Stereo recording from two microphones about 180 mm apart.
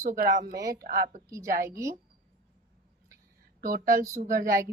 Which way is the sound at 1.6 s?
15° right (ahead or behind).